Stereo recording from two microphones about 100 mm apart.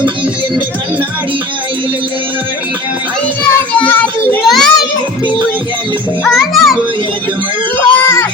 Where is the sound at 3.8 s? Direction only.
20° left (ahead or behind).